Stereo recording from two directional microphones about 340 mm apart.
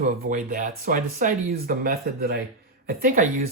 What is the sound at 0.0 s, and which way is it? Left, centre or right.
Speech, right.